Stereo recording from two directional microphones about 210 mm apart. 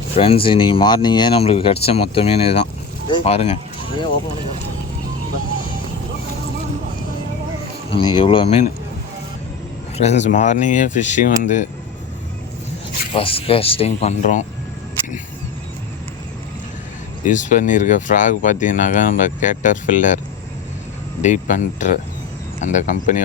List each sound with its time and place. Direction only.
0.2 s speech: 25° left (ahead or behind)
7.9 s speech: 25° left (ahead or behind)
10.0 s speech: 35° left (ahead or behind)
13.1 s speech: 25° left (ahead or behind)
17.2 s speech: 35° left (ahead or behind)
21.2 s speech: 35° left (ahead or behind)